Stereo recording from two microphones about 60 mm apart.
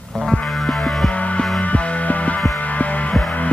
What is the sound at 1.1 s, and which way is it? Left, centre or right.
Music, left.